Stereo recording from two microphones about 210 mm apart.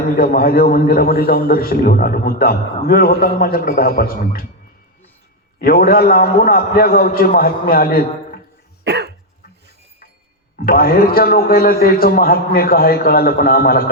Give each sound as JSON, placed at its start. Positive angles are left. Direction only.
{"t": 0.2, "sound": "a man's voice", "side_deg": 45}
{"t": 5.6, "sound": "a man's voice", "side_deg": 45}
{"t": 8.8, "sound": "cough", "side_deg": -50}
{"t": 10.6, "sound": "a man's voice", "side_deg": 45}